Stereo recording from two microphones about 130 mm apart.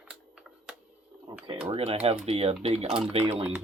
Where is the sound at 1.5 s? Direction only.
45° right (ahead or behind).